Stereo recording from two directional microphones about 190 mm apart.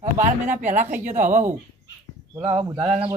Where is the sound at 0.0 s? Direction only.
40° right (ahead or behind).